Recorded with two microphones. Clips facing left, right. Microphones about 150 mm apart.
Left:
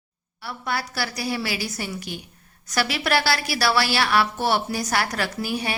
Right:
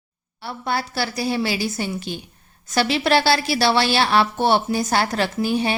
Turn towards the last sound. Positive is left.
turn(degrees=-25)  # may be behind; listen again after turning